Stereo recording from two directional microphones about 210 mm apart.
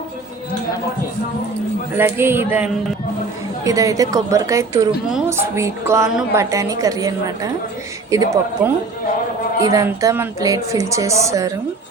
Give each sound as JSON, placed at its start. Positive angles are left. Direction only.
{"t": 2.0, "sound": "speech", "side_deg": -10}